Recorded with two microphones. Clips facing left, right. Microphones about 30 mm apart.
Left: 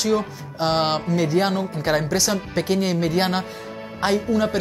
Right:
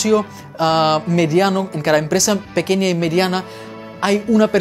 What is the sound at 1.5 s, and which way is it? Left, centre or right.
Speech, right.